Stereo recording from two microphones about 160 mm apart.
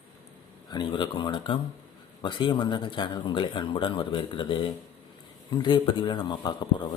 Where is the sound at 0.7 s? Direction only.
30° left (ahead or behind).